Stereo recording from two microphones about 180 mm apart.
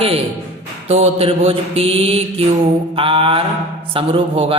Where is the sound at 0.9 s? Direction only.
35° right (ahead or behind).